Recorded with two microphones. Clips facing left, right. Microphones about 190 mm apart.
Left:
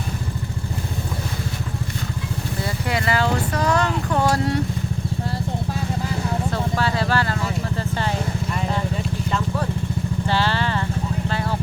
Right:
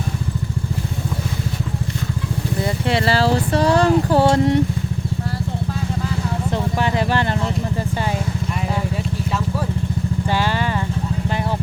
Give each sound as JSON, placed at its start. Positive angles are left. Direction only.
{"t": 2.6, "sound": "a sound", "side_deg": -25}
{"t": 6.5, "sound": "vehicle", "side_deg": -20}
{"t": 10.2, "sound": "vehicle", "side_deg": -15}